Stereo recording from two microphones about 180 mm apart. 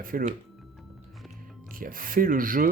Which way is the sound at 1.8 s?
50° right (ahead or behind).